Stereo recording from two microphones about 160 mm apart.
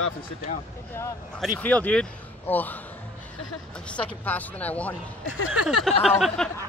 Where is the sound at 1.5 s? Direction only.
10° left (ahead or behind).